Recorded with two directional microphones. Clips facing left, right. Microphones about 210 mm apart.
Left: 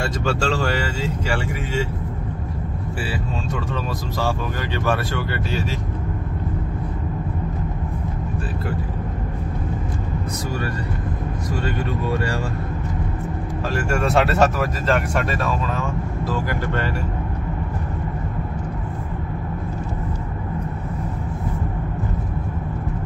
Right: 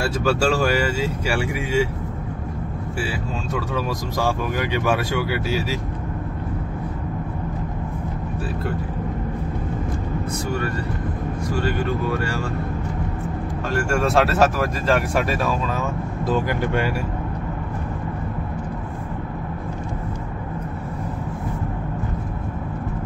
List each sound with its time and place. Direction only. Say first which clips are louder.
0.0 s speech: right 3 dB; 10° right (ahead or behind)
3.0 s speech: even; 5° right (ahead or behind)
13.8 s speech: even; centre (ahead or behind)
16.3 s speech: right 5 dB; 15° right (ahead or behind)